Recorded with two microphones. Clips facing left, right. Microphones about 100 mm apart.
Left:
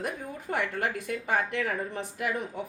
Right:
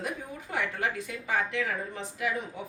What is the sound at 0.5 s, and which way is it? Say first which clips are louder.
Speech: left 1 dB; 55° left (ahead or behind).